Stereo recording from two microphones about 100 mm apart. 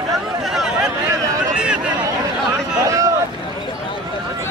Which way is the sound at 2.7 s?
35° right (ahead or behind).